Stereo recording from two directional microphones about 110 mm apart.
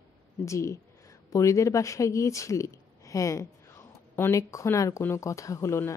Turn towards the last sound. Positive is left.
turn(degrees=25)  # may be behind; listen again after turning